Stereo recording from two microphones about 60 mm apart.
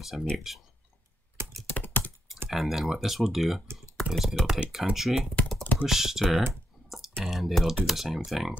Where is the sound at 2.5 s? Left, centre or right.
Centre.